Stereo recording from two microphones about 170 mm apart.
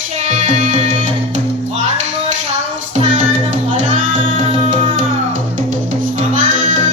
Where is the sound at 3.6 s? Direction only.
45° right (ahead or behind).